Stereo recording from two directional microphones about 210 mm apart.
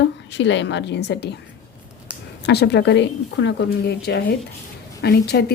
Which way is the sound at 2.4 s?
50° left (ahead or behind).